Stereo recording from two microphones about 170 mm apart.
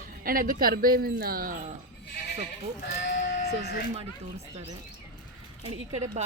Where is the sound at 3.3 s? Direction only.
70° left (ahead or behind).